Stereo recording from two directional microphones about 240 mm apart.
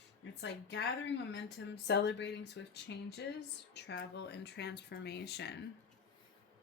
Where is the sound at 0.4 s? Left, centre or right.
Left.